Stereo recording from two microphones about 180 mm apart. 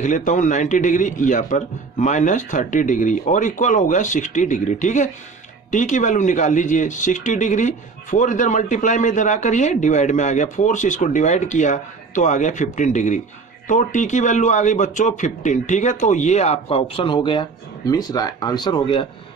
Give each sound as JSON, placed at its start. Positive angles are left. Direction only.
{"t": 0.0, "sound": "speech", "side_deg": 45}